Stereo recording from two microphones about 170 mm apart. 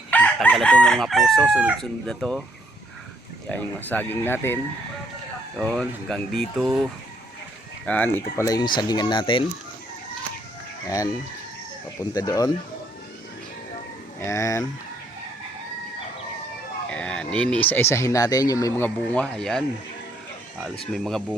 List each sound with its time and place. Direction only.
0.1 s chicken: 10° left (ahead or behind)
3.5 s speech: 10° left (ahead or behind)
5.5 s chicken: 5° left (ahead or behind)
7.9 s speech: 10° left (ahead or behind); by 9.5 s 30° left (ahead or behind)
10.8 s speech: 20° left (ahead or behind)
12.1 s speech: 20° left (ahead or behind)
14.3 s speech: 20° left (ahead or behind)
16.9 s speech: 5° left (ahead or behind)
19.1 s chicken: 10° left (ahead or behind)
20.9 s chicken: centre (ahead or behind)